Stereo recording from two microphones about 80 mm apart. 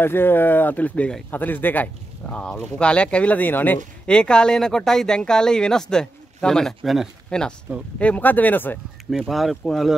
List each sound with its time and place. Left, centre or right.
0.0 s speech: left
4.1 s speech: centre
7.2 s speech: centre
8.0 s speech: left
9.3 s speech: centre